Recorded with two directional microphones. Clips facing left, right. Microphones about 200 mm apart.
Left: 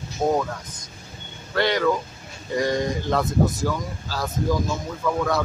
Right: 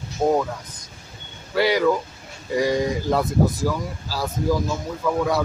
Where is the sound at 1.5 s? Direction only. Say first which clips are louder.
Right 2 dB; 10° right (ahead or behind).